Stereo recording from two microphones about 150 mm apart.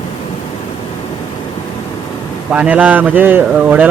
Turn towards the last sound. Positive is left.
turn(degrees=-10)  # may be behind; listen again after turning